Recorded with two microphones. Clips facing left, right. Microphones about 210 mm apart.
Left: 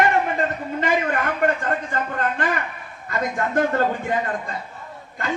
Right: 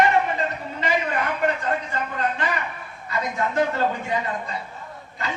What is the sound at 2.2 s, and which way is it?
A man's voice, 50° left (ahead or behind).